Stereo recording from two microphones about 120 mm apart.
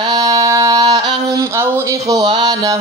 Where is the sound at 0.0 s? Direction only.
35° right (ahead or behind).